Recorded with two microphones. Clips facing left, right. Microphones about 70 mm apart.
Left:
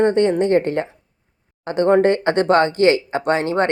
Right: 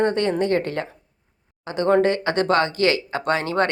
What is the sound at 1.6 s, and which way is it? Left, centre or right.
Speech, left.